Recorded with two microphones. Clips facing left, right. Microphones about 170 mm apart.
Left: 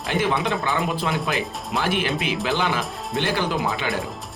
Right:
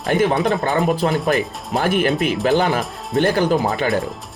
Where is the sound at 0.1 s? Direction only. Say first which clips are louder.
Right 6 dB; 45° right (ahead or behind).